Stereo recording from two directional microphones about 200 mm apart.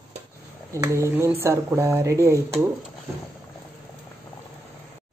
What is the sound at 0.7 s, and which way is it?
A woman's voice, 15° right (ahead or behind).